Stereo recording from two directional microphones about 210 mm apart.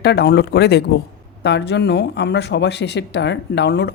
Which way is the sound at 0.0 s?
50° left (ahead or behind).